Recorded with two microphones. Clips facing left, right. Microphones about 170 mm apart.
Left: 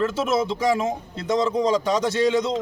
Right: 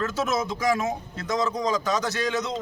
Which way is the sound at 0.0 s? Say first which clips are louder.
Left 4 dB; 30° left (ahead or behind).